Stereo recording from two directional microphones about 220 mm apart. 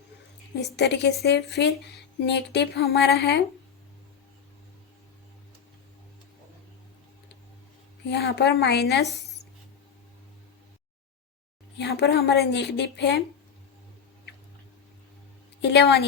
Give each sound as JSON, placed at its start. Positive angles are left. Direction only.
{"t": 0.8, "sound": "a woman's voice", "side_deg": 50}
{"t": 8.0, "sound": "a woman's voice", "side_deg": 50}
{"t": 11.8, "sound": "a woman's voice", "side_deg": 50}
{"t": 15.7, "sound": "a woman's voice", "side_deg": 45}